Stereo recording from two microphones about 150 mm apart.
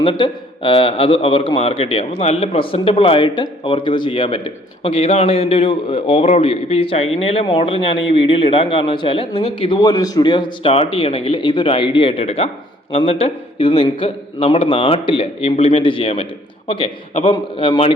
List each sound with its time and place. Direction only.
0.0 s a man's voice: 35° left (ahead or behind)